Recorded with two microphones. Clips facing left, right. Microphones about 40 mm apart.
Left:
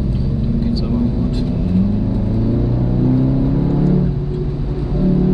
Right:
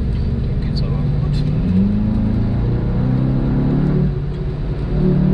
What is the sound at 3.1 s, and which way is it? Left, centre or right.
Vehicle, centre.